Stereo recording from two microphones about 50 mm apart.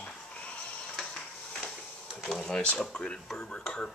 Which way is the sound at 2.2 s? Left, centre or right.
Centre.